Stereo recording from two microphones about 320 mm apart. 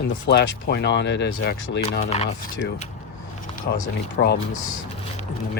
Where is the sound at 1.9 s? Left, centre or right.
Left.